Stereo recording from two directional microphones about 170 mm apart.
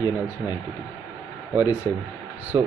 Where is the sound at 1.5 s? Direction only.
10° right (ahead or behind).